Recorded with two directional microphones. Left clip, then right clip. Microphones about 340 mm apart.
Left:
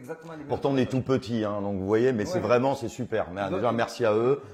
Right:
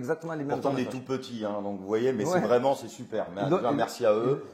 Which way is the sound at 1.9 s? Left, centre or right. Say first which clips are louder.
Left 1 dB; left.